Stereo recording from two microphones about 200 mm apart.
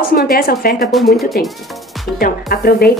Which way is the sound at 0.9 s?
Centre (ahead or behind).